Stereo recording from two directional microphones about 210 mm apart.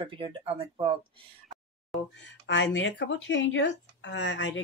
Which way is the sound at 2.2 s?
60° left (ahead or behind).